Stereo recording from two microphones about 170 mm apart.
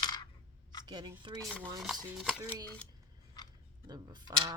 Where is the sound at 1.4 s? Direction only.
10° left (ahead or behind).